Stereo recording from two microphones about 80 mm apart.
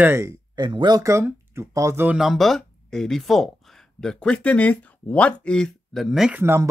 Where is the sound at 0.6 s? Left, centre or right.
Right.